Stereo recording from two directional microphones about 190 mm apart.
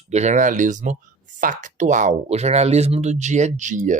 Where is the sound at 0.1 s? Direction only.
35° right (ahead or behind).